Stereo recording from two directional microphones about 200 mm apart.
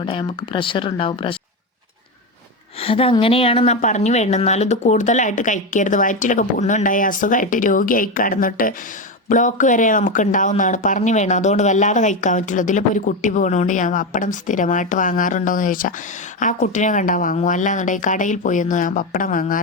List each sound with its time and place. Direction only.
0.0 s speech: 25° left (ahead or behind)
2.8 s speech: 25° left (ahead or behind); by 19.6 s 40° left (ahead or behind)